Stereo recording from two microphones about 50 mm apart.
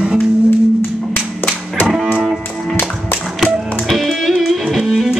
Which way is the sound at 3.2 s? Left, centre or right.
Centre.